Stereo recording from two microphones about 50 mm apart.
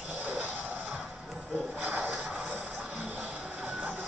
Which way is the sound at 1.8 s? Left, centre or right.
Right.